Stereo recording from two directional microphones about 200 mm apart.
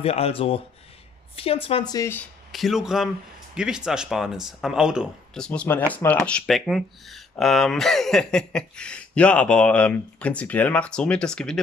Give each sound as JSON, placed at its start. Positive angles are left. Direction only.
{"t": 0.0, "sound": "speech", "side_deg": 30}
{"t": 2.5, "sound": "speech", "side_deg": 0}